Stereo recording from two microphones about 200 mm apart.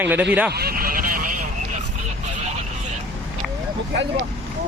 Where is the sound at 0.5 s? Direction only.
50° right (ahead or behind).